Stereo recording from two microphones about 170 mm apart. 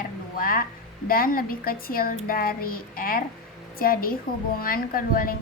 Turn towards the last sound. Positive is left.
turn(degrees=55)  # may be behind; listen again after turning